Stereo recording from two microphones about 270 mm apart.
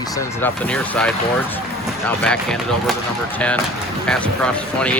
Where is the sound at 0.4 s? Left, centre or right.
Centre.